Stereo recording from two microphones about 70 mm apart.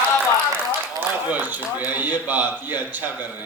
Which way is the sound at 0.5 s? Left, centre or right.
Right.